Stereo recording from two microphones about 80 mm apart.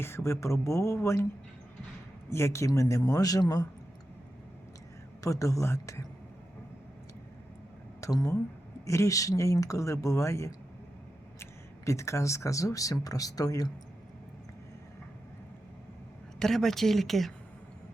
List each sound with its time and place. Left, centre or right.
0.0 s speech: left
2.3 s speech: left
5.2 s speech: left
8.0 s speech: left
11.9 s speech: left
16.4 s speech: centre